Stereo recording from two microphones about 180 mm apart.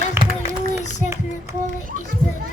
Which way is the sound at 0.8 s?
40° left (ahead or behind).